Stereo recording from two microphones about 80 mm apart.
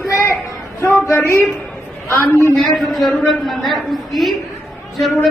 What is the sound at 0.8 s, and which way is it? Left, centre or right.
A woman's voice, left.